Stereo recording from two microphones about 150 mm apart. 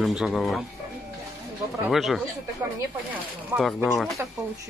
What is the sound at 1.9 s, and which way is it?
Speech, centre (ahead or behind).